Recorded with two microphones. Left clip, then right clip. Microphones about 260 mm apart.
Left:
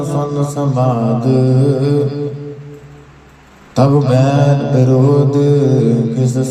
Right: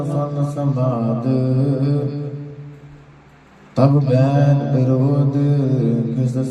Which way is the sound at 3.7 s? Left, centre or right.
Left.